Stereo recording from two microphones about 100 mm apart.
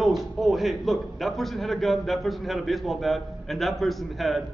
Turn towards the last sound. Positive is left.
turn(degrees=0)  # may be behind; listen again after turning